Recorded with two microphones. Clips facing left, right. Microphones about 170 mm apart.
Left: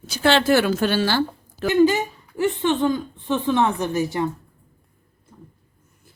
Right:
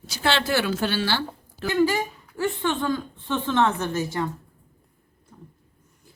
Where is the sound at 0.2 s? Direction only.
50° left (ahead or behind).